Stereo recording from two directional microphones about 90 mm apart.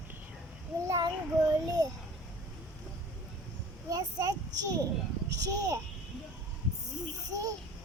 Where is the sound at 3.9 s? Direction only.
45° right (ahead or behind).